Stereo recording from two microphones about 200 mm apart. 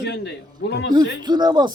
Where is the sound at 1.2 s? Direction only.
20° right (ahead or behind).